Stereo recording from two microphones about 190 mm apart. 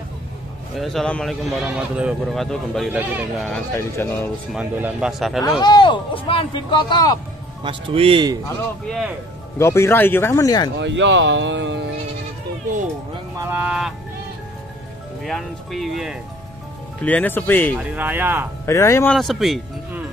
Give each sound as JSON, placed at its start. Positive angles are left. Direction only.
{"t": 0.7, "sound": "speech", "side_deg": 0}
{"t": 3.7, "sound": "speech", "side_deg": 10}
{"t": 4.6, "sound": "speech", "side_deg": -10}
{"t": 5.6, "sound": "speech", "side_deg": 25}
{"t": 7.6, "sound": "speech", "side_deg": -30}
{"t": 8.8, "sound": "speech", "side_deg": 0}
{"t": 9.6, "sound": "speech", "side_deg": 15}
{"t": 10.8, "sound": "speech", "side_deg": -75}
{"t": 13.5, "sound": "speech", "side_deg": -5}
{"t": 15.2, "sound": "speech", "side_deg": 0}
{"t": 17.0, "sound": "speech", "side_deg": 10}
{"t": 17.7, "sound": "speech", "side_deg": -10}
{"t": 18.7, "sound": "speech", "side_deg": 15}
{"t": 19.1, "sound": "speech", "side_deg": 0}